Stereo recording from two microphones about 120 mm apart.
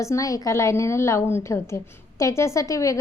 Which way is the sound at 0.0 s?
25° left (ahead or behind).